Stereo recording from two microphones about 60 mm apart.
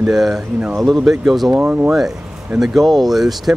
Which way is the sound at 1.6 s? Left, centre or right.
Right.